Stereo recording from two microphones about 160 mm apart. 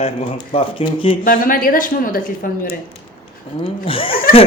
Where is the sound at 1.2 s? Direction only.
60° left (ahead or behind).